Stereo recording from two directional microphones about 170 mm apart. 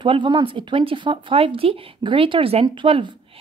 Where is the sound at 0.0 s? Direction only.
30° right (ahead or behind).